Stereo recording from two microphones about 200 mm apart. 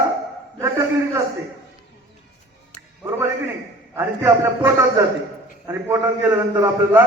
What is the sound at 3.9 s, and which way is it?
A man's voice, 15° right (ahead or behind).